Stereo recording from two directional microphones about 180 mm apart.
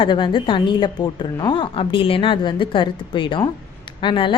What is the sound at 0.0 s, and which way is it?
A woman's voice, 25° left (ahead or behind).